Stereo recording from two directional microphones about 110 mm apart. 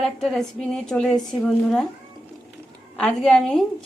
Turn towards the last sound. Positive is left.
turn(degrees=5)  # may be behind; listen again after turning